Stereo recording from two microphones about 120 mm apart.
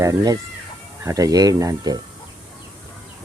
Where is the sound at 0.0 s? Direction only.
30° right (ahead or behind).